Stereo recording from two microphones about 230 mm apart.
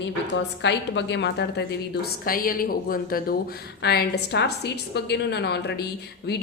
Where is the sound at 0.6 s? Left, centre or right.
Left.